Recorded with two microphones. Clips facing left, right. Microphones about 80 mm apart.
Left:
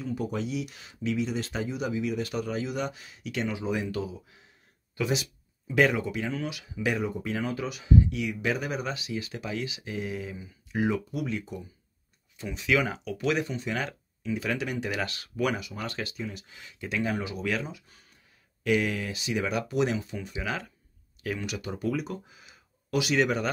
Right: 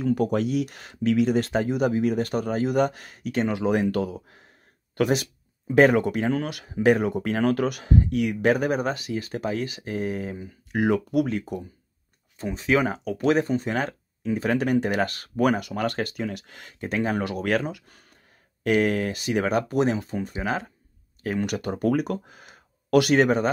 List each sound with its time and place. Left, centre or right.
0.0 s speech: right
3.5 s speech: right
7.1 s speech: right
12.4 s speech: right
15.7 s speech: right
18.6 s speech: right